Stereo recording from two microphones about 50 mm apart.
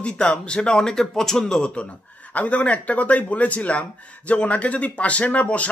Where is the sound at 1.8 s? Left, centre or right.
Left.